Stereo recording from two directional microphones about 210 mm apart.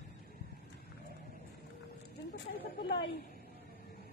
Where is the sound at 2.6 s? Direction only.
55° left (ahead or behind).